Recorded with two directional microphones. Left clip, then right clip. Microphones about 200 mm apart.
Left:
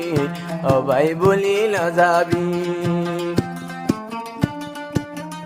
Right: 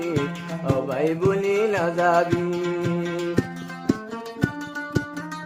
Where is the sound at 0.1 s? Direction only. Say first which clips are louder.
Left 4 dB; 35° left (ahead or behind).